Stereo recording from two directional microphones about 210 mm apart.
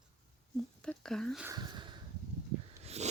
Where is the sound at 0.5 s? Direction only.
5° left (ahead or behind).